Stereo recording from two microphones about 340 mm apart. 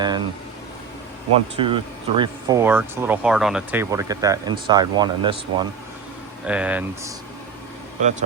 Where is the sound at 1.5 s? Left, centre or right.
Centre.